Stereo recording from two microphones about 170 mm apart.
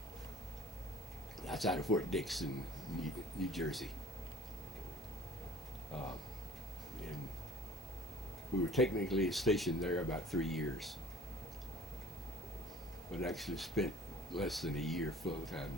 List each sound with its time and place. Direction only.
1.4 s speech: centre (ahead or behind)
5.9 s speech: 35° left (ahead or behind)
8.7 s speech: centre (ahead or behind)
13.1 s speech: centre (ahead or behind)